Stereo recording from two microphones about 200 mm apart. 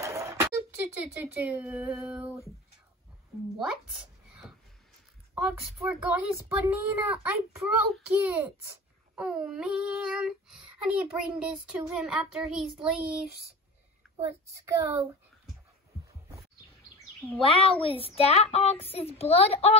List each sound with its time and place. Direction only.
0.0 s a sound: 15° right (ahead or behind)
1.1 s speech: 10° right (ahead or behind)
5.3 s a child's voice: 10° right (ahead or behind)
14.5 s speech: 15° right (ahead or behind)
17.5 s a child's voice: 25° left (ahead or behind)